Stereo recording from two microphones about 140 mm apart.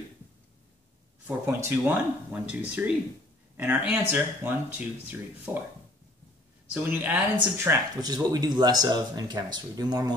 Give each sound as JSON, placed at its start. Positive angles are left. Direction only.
{"t": 1.2, "sound": "speech", "side_deg": -15}
{"t": 6.7, "sound": "speech", "side_deg": -15}